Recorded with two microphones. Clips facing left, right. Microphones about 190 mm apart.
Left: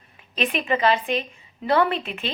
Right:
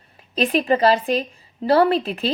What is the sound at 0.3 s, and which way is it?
A woman's voice, 35° right (ahead or behind).